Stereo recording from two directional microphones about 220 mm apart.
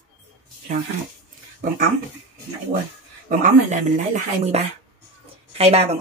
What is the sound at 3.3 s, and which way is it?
Speech, 35° right (ahead or behind).